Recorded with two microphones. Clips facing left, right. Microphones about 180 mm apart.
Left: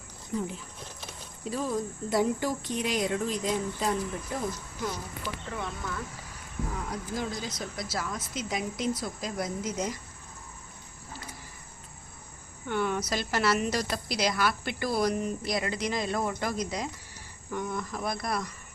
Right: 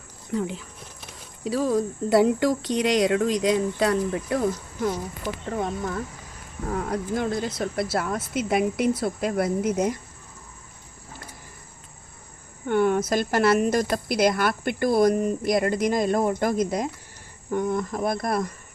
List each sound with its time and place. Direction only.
0.3 s speech: 70° right (ahead or behind)
5.2 s speech: 45° right (ahead or behind)
6.7 s speech: 55° right (ahead or behind)
12.6 s speech: 50° right (ahead or behind)